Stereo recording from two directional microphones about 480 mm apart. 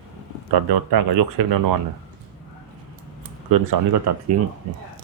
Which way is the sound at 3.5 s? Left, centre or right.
Right.